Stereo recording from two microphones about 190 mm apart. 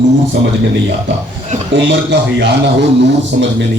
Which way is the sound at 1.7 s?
70° right (ahead or behind).